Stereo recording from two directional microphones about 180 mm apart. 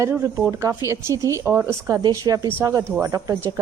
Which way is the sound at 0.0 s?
15° right (ahead or behind).